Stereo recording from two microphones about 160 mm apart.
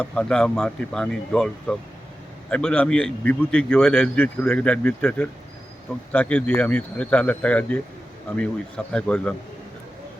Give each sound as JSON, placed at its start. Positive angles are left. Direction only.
{"t": 0.0, "sound": "a man's voice", "side_deg": 5}